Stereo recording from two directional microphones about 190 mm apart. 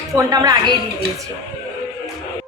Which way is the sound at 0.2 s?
20° right (ahead or behind).